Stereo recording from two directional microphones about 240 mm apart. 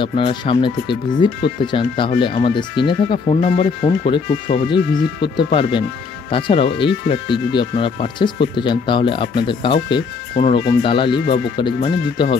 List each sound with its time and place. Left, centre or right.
0.0 s speech: left